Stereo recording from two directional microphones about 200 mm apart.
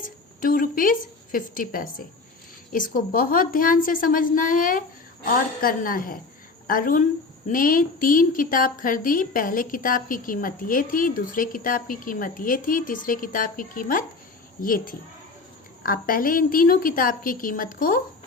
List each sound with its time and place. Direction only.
0.0 s a woman's voice: 45° left (ahead or behind)